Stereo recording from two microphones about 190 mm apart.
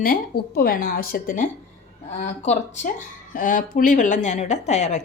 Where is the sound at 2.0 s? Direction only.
35° left (ahead or behind).